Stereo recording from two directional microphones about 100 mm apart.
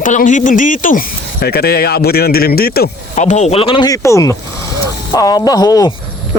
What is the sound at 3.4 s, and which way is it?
Speech, 80° left.